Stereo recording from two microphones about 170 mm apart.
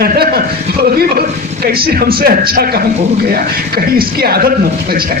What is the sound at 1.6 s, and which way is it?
Speech, 65° right (ahead or behind).